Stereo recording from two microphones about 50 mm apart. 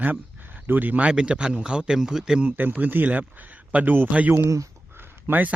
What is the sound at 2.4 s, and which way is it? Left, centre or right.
A man's voice, right.